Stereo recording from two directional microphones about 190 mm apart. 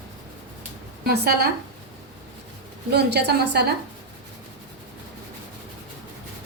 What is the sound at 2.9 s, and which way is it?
Speech, 60° right (ahead or behind).